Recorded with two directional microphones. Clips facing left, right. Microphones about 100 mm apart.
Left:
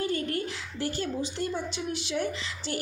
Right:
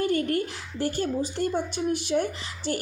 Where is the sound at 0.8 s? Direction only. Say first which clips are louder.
Right 4 dB; 45° right (ahead or behind).